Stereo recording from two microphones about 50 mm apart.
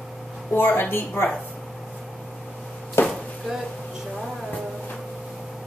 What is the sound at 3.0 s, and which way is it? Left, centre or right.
Chopping, left.